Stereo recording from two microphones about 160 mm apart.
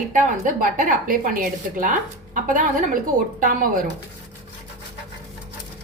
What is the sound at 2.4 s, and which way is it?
Speech, 55° right (ahead or behind).